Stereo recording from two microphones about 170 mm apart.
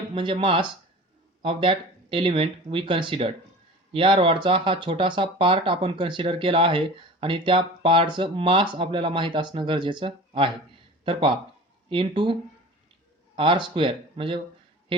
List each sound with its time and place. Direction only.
0.1 s speech: 30° right (ahead or behind)